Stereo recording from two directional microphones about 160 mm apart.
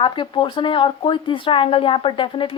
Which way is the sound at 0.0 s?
30° left (ahead or behind).